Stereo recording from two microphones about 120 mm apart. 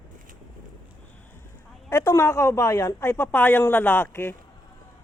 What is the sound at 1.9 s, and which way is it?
A woman's voice, 25° left (ahead or behind).